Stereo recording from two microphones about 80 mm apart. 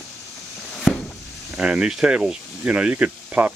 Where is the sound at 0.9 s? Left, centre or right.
Centre.